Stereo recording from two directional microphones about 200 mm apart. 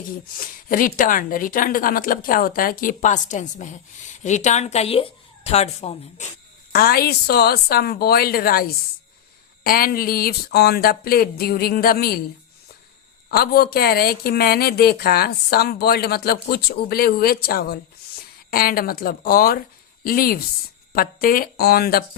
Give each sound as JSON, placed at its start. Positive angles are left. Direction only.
{"t": 0.3, "sound": "a woman's voice", "side_deg": 45}
{"t": 6.7, "sound": "a woman's voice", "side_deg": 50}
{"t": 13.3, "sound": "a woman's voice", "side_deg": 50}